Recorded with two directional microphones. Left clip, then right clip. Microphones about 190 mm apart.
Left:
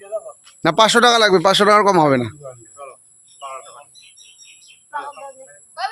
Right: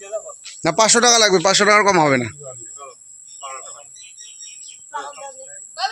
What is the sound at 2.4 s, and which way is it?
Speech, 5° right (ahead or behind).